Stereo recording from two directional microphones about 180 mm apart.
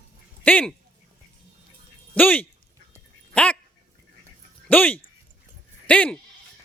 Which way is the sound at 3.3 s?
5° left (ahead or behind).